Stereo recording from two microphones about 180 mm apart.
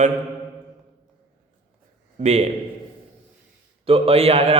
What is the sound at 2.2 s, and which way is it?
Speech, 40° right (ahead or behind).